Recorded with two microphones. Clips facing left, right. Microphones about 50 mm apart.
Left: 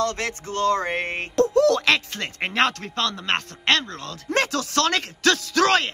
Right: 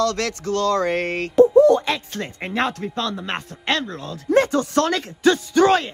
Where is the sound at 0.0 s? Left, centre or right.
Left.